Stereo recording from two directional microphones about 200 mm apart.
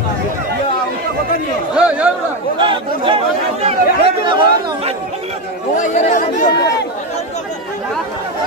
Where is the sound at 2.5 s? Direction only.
25° right (ahead or behind).